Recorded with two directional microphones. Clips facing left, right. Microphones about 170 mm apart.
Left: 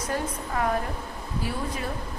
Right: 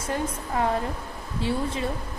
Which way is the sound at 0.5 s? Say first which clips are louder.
Right 1 dB; 25° right (ahead or behind).